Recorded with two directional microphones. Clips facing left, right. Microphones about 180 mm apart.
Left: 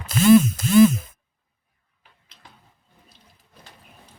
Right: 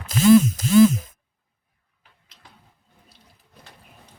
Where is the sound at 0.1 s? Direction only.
55° left (ahead or behind).